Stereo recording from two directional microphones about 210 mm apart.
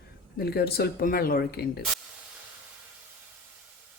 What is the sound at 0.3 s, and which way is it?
Speech, 50° left (ahead or behind).